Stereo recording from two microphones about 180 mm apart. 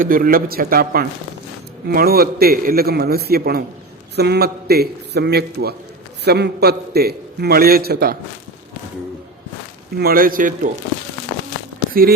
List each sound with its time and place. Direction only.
0.0 s a man's voice: 50° right (ahead or behind)
10.0 s a man's voice: 55° right (ahead or behind)